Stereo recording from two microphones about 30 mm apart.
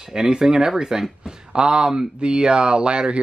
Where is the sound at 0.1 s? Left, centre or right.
Right.